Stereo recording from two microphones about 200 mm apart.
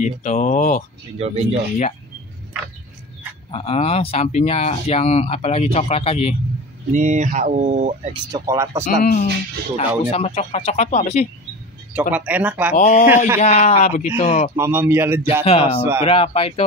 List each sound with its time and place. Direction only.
0.2 s speech: 35° left (ahead or behind)
1.1 s speech: 30° right (ahead or behind)
3.5 s speech: 30° left (ahead or behind)
6.9 s speech: 35° right (ahead or behind)
8.3 s speech: 15° right (ahead or behind)
8.8 s speech: 45° left (ahead or behind)
9.8 s speech: 30° left (ahead or behind)
11.9 s speech: 5° right (ahead or behind)
12.7 s speech: 35° left (ahead or behind)
14.5 s speech: 10° right (ahead or behind)
15.4 s speech: 30° left (ahead or behind)